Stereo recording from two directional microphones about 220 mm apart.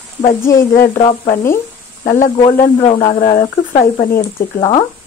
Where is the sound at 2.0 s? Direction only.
35° left (ahead or behind).